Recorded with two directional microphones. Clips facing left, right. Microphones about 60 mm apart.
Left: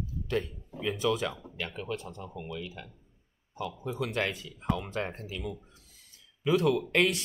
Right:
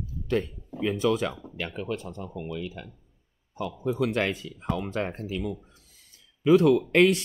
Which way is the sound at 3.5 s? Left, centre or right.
Right.